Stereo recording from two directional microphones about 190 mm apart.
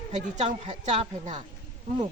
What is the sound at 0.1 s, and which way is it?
Speech, 35° right (ahead or behind).